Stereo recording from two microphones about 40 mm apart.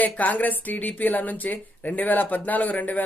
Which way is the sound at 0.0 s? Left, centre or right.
Left.